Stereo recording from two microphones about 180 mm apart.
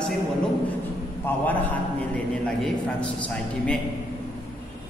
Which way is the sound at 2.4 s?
5° left (ahead or behind).